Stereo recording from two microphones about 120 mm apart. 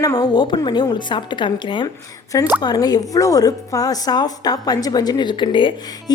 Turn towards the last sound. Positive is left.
turn(degrees=40)  # may be behind; listen again after turning